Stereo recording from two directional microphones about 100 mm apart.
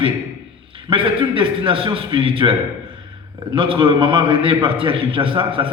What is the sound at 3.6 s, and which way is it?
A man's voice, 60° right (ahead or behind).